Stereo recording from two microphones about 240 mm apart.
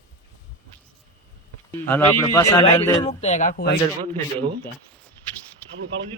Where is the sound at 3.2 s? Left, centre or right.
Left.